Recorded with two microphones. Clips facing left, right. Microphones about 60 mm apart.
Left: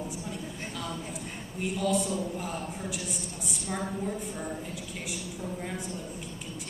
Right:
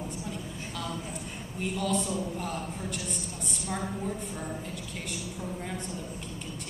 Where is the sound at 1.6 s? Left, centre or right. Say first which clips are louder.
Left 2 dB; centre.